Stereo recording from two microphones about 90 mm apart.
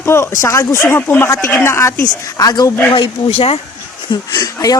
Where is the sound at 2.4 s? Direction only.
45° left (ahead or behind).